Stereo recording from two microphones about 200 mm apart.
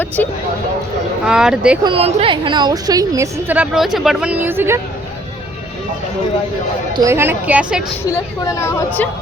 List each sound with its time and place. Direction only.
1.2 s speech: 5° right (ahead or behind)
1.8 s a woman's voice: 30° right (ahead or behind); by 4.8 s 10° right (ahead or behind)
6.9 s a woman's voice: 15° right (ahead or behind)
8.1 s speech: 15° left (ahead or behind)